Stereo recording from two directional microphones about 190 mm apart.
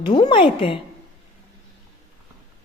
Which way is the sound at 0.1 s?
25° left (ahead or behind).